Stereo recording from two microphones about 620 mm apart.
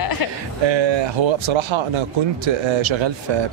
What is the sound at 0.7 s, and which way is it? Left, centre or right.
Speech, right.